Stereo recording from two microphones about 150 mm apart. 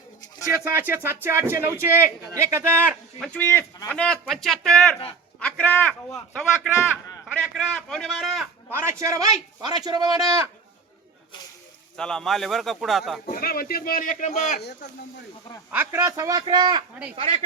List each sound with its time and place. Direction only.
0.5 s speech: 15° right (ahead or behind)
3.3 s speech: 15° left (ahead or behind)
7.5 s speech: centre (ahead or behind)
8.7 s a man's voice: 15° right (ahead or behind)
11.9 s speech: 5° left (ahead or behind)
13.3 s speech: 80° left; by 14.6 s 50° left (ahead or behind)
15.7 s a man's voice: 15° right (ahead or behind); by 17.4 s 40° right (ahead or behind)